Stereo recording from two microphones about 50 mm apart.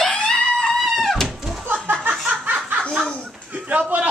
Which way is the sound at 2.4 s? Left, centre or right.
Right.